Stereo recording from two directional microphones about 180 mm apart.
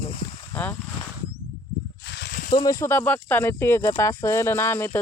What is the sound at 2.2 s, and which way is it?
Snake, 75° left (ahead or behind).